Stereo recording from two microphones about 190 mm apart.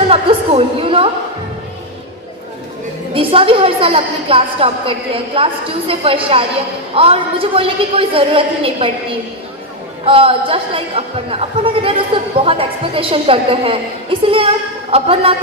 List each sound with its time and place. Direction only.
0.1 s a sound: 30° right (ahead or behind)
3.2 s speech: 30° right (ahead or behind)
10.0 s speech: 30° right (ahead or behind)